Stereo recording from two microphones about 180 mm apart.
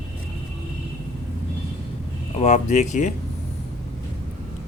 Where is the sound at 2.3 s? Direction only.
40° left (ahead or behind).